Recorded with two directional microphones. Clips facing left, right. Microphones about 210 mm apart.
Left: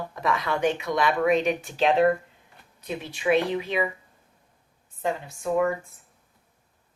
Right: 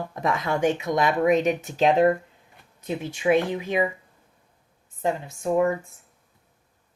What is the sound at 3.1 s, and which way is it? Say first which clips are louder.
Speech: right 2 dB; 20° right (ahead or behind).